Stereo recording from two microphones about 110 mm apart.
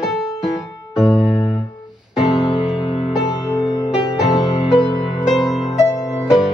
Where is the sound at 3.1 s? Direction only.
45° left (ahead or behind).